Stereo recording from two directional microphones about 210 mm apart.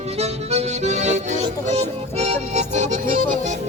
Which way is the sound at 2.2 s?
30° right (ahead or behind).